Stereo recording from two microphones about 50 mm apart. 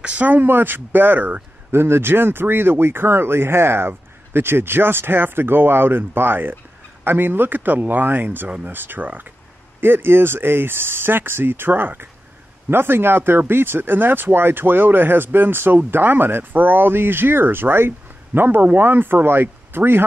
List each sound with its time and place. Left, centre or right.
0.0 s speech: right
1.7 s speech: right
9.8 s speech: right